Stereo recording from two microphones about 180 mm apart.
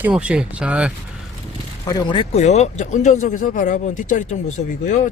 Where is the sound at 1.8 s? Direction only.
30° left (ahead or behind); by 5.1 s 45° left (ahead or behind).